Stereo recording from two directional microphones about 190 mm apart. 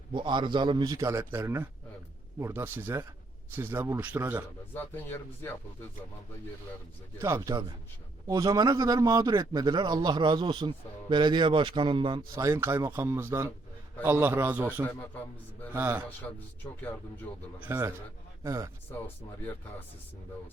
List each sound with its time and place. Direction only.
0.1 s a man's voice: 25° right (ahead or behind)
4.7 s speech: 10° left (ahead or behind)
7.2 s a man's voice: 15° right (ahead or behind)
14.8 s speech: 10° left (ahead or behind)
15.7 s a man's voice: 10° right (ahead or behind)
17.6 s a man's voice: 10° right (ahead or behind)
18.9 s speech: 10° left (ahead or behind)